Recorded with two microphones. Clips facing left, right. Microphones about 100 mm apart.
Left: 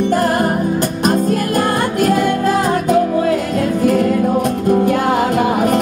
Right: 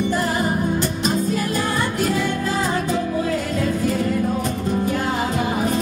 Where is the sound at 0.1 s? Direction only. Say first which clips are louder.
Left 6 dB; 55° left (ahead or behind).